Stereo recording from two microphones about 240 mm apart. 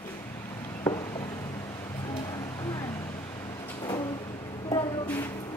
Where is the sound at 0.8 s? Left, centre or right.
Centre.